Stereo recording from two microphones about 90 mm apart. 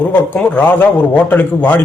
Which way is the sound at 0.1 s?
20° left (ahead or behind).